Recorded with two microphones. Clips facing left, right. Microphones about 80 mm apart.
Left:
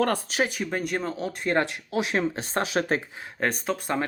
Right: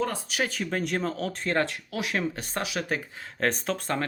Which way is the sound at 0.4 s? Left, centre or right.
Centre.